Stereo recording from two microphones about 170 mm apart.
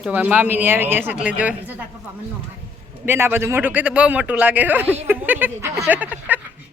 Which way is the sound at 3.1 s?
15° right (ahead or behind).